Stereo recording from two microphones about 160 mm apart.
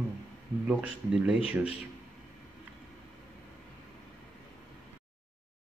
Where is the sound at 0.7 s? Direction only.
5° right (ahead or behind).